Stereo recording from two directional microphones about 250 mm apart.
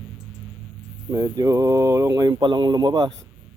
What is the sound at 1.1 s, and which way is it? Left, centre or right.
Speech, centre.